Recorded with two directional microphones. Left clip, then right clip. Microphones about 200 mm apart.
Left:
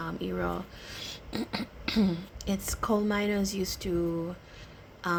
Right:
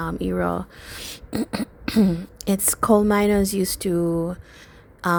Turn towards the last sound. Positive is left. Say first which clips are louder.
# right 8 dB
turn(degrees=-50)  # may be behind; listen again after turning